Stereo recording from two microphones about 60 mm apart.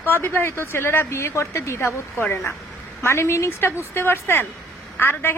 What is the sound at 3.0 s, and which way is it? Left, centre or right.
A woman's voice, left.